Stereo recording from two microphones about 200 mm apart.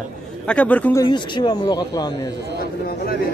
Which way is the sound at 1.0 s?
20° left (ahead or behind).